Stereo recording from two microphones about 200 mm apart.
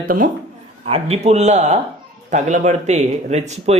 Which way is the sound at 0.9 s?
30° right (ahead or behind).